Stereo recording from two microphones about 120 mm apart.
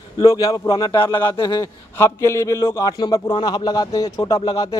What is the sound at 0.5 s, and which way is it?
A man's voice, 35° left (ahead or behind).